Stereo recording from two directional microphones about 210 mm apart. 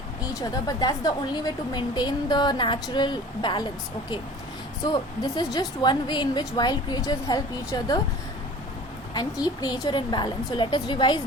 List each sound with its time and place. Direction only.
0.2 s a woman's voice: 15° left (ahead or behind)
4.9 s a woman's voice: 20° left (ahead or behind)
9.1 s a woman's voice: 20° left (ahead or behind)